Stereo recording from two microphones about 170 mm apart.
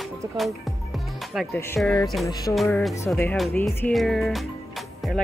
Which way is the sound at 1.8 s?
5° left (ahead or behind).